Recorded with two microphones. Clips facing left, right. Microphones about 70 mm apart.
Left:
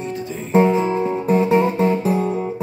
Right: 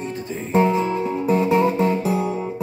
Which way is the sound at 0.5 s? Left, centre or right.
Left.